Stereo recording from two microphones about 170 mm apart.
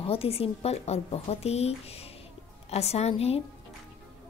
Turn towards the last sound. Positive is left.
turn(degrees=35)  # may be behind; listen again after turning